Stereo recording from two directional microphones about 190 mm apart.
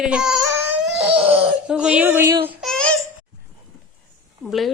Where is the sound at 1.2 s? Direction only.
5° right (ahead or behind).